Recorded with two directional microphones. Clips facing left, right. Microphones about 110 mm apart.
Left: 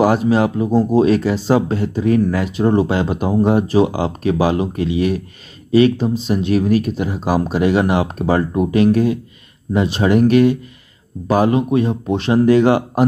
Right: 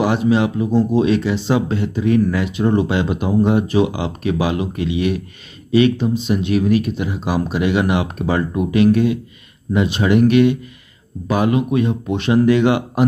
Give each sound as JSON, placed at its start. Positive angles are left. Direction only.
{"t": 0.0, "sound": "speech", "side_deg": 40}